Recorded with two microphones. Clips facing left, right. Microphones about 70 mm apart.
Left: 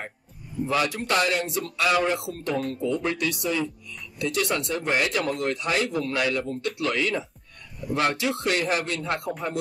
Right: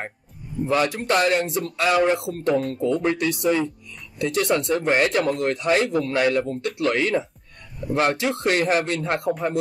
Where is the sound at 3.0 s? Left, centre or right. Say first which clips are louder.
Right 5 dB; right.